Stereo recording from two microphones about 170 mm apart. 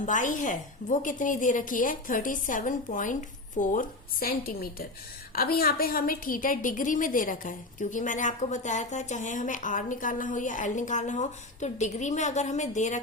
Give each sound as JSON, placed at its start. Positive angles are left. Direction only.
{"t": 0.0, "sound": "a woman's voice", "side_deg": 50}